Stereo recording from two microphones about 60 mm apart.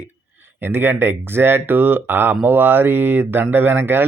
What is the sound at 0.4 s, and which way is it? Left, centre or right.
Speech, right.